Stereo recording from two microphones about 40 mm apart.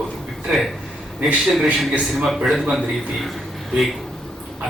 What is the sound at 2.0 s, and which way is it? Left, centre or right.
Speech, centre.